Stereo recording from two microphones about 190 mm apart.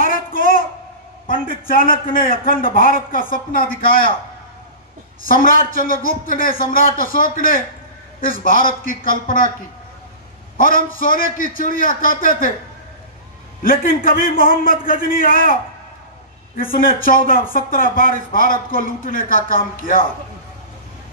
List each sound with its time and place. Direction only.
0.1 s a sound: 50° left (ahead or behind)
1.2 s speech: 50° left (ahead or behind)
5.2 s speech: 45° left (ahead or behind)
10.6 s speech: 45° left (ahead or behind)
13.6 s speech: 50° left (ahead or behind)